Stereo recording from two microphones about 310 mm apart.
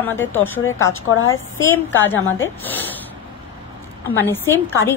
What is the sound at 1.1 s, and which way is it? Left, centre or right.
Speech, left.